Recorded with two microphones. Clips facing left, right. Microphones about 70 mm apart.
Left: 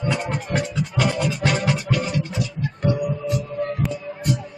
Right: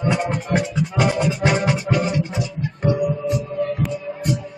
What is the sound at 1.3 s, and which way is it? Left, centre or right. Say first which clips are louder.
Music: right 3 dB; centre.